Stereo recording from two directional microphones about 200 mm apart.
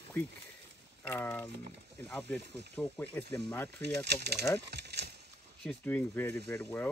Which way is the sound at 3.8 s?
55° right (ahead or behind).